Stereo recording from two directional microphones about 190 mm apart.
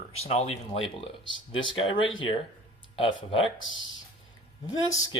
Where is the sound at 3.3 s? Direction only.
30° left (ahead or behind).